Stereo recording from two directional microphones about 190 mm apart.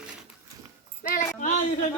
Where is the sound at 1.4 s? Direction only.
40° left (ahead or behind).